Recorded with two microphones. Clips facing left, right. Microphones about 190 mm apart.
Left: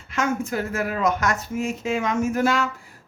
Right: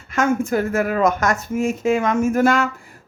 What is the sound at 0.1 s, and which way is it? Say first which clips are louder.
A woman's voice: right 6 dB; 50° right (ahead or behind).